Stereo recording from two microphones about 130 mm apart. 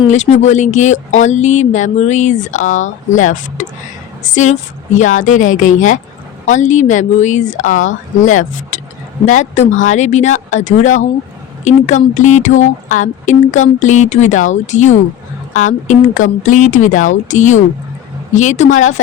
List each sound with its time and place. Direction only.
0.1 s speech: 65° left (ahead or behind)
15.9 s speech: 85° left; by 18.9 s 70° left (ahead or behind)